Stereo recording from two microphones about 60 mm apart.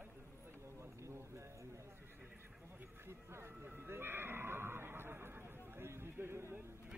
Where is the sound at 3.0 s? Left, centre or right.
Right.